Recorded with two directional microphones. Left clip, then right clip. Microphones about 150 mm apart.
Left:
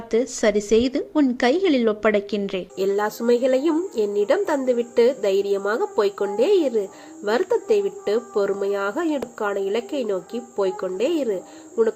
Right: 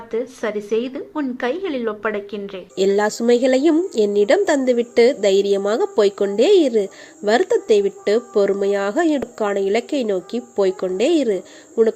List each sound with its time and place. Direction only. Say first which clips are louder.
0.1 s a woman's voice: left 4 dB; 60° left (ahead or behind)
2.7 s a woman's voice: right 6 dB; 45° right (ahead or behind)